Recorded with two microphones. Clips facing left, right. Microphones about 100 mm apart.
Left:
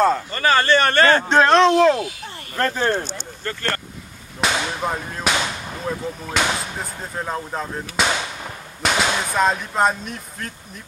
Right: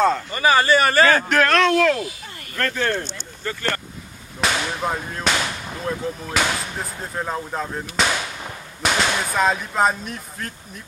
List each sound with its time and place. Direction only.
0.3 s a man's voice: 10° right (ahead or behind)
1.3 s speech: 30° left (ahead or behind)
3.4 s speech: 15° right (ahead or behind)
4.5 s a sound: 10° left (ahead or behind)
4.8 s speech: centre (ahead or behind)